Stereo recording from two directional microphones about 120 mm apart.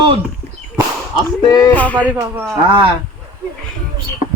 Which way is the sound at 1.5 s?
35° left (ahead or behind).